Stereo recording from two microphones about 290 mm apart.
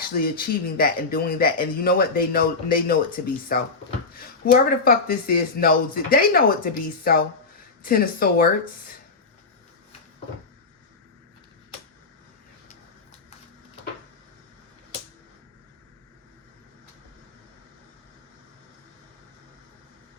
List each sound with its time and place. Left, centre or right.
0.2 s speech: left